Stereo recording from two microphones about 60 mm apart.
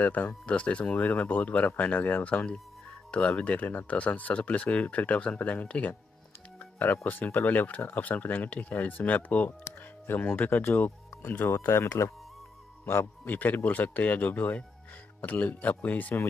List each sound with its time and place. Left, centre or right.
0.0 s speech: left
7.1 s speech: left
11.5 s speech: left